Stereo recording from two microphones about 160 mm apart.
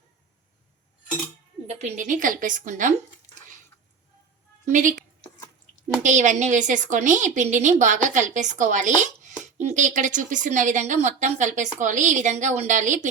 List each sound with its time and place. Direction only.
1.6 s speech: 50° right (ahead or behind)
4.6 s a woman's voice: 50° right (ahead or behind)